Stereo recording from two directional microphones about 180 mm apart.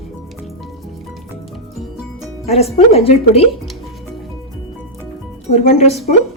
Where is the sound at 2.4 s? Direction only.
35° left (ahead or behind).